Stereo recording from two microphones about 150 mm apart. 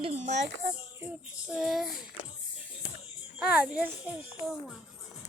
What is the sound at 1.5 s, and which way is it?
Speech, centre (ahead or behind).